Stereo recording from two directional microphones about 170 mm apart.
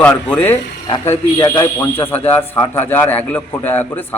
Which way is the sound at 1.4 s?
25° left (ahead or behind).